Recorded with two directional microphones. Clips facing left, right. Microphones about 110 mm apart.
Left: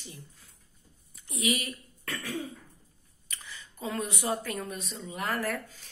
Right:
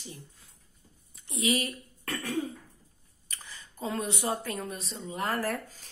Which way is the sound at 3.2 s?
35° right (ahead or behind).